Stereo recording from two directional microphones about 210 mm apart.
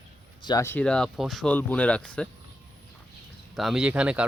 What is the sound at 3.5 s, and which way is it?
Speech, centre (ahead or behind).